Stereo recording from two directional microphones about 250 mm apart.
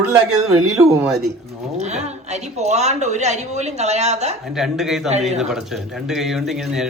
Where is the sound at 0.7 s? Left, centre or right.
Centre.